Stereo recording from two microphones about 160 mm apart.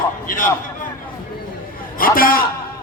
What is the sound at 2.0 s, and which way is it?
Speech, 60° left (ahead or behind).